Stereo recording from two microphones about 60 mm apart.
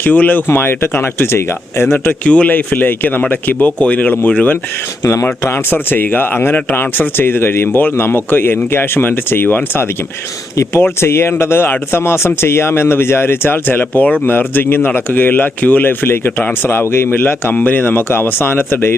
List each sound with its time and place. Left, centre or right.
0.0 s speech: left
1.9 s speech: left
17.2 s speech: left